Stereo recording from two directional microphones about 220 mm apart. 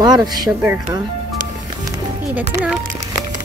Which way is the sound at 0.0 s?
20° right (ahead or behind).